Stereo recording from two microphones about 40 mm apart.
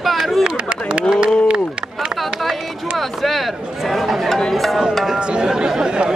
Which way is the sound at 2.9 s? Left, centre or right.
Centre.